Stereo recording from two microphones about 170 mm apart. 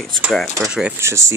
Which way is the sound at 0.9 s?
15° right (ahead or behind).